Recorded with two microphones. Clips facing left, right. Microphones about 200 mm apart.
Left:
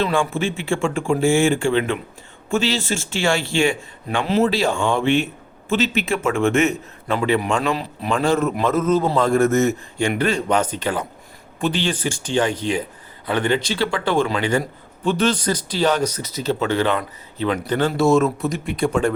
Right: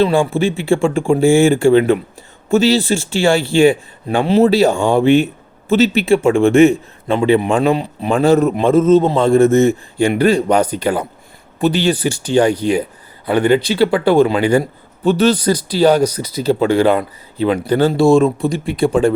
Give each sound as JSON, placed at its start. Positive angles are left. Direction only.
{"t": 0.0, "sound": "a man's voice", "side_deg": -35}